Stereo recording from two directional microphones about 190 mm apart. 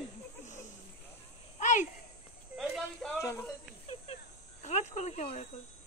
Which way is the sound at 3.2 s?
15° left (ahead or behind).